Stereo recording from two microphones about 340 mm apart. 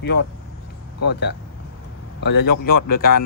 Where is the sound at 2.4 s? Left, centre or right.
Left.